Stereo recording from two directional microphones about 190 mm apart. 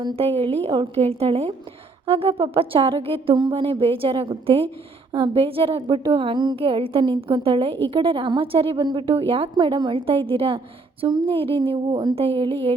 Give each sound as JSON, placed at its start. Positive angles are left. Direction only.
{"t": 0.0, "sound": "a woman's voice", "side_deg": -25}